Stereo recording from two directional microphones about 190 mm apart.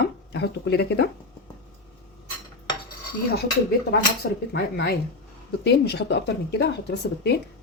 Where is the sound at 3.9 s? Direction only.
55° left (ahead or behind).